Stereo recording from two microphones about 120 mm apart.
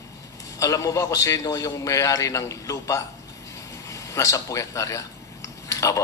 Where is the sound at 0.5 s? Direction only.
25° left (ahead or behind).